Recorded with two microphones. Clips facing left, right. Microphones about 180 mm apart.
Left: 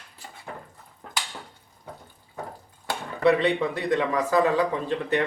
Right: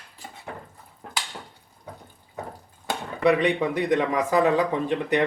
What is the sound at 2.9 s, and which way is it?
Speech, 15° right (ahead or behind).